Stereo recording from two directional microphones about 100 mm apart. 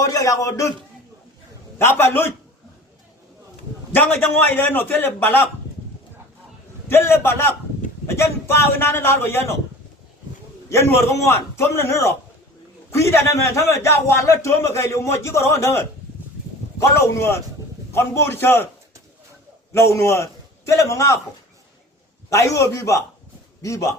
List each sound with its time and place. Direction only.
0.0 s a man's voice: 35° left (ahead or behind)
1.8 s a man's voice: 25° left (ahead or behind)
3.9 s a man's voice: 20° left (ahead or behind)
6.8 s a man's voice: 25° left (ahead or behind)
10.7 s a man's voice: 30° left (ahead or behind)
17.2 s a man's voice: 25° left (ahead or behind)
19.7 s a man's voice: 30° left (ahead or behind)
22.3 s a man's voice: 30° left (ahead or behind)